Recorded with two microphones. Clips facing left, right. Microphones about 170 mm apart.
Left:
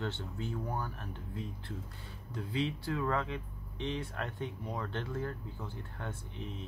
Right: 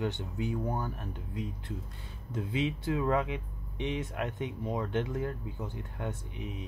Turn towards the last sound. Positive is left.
turn(degrees=-15)  # may be behind; listen again after turning